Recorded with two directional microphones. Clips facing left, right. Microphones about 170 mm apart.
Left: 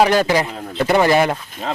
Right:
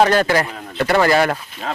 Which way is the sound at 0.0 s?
10° left (ahead or behind).